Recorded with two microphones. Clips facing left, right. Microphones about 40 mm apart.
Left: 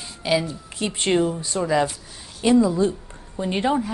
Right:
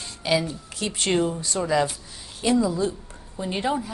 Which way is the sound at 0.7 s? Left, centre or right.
Left.